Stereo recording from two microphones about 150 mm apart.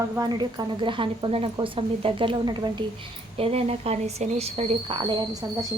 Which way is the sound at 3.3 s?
40° right (ahead or behind).